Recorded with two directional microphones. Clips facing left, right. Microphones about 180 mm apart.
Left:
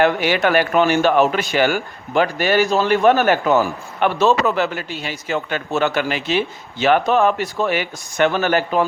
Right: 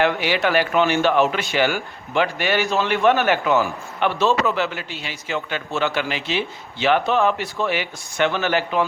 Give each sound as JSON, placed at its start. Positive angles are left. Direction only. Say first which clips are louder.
{"t": 0.0, "sound": "speech", "louder": "left 3 dB", "side_deg": 50}